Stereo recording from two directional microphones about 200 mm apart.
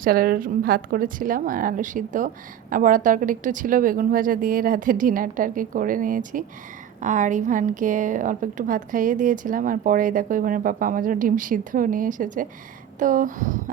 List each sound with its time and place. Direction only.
0.0 s a woman's voice: 45° right (ahead or behind)